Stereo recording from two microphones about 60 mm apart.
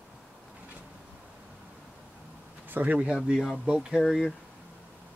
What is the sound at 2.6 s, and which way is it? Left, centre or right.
Speech, right.